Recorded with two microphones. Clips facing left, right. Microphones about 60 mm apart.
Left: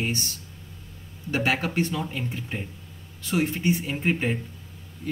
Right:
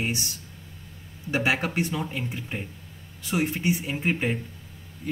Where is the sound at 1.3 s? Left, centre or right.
Centre.